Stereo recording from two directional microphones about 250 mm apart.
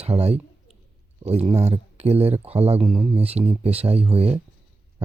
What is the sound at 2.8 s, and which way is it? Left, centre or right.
Speech, centre.